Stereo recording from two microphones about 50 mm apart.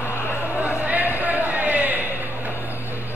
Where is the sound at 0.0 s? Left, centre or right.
Left.